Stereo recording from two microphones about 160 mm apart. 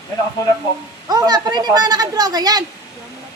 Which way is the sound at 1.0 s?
25° right (ahead or behind).